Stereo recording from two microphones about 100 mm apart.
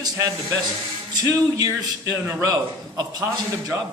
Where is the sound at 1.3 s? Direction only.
35° right (ahead or behind).